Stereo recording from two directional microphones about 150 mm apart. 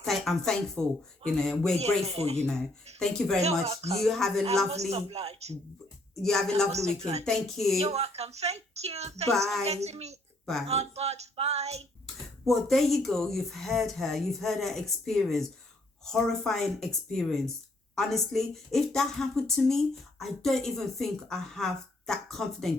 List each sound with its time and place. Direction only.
0.0 s speech: centre (ahead or behind)
1.8 s speech: 45° right (ahead or behind)
3.0 s speech: 5° left (ahead or behind)
3.4 s speech: 45° right (ahead or behind)
4.0 s speech: centre (ahead or behind)
4.7 s speech: 45° right (ahead or behind)
6.2 s speech: 5° left (ahead or behind)
6.7 s speech: 45° right (ahead or behind)
7.3 s speech: centre (ahead or behind)
7.8 s speech: 40° right (ahead or behind)
12.5 s speech: centre (ahead or behind)